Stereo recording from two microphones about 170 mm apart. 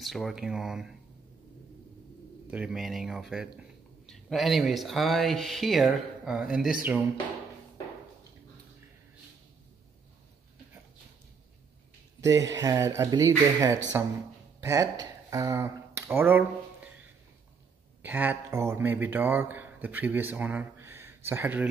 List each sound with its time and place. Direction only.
0.0 s speech: centre (ahead or behind)
2.5 s speech: 5° right (ahead or behind)
12.2 s speech: 20° right (ahead or behind)
18.0 s speech: 10° right (ahead or behind)